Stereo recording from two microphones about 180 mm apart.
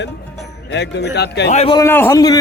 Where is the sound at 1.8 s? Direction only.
15° left (ahead or behind).